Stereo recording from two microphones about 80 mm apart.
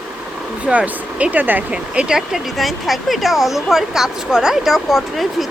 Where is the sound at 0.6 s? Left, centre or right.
Centre.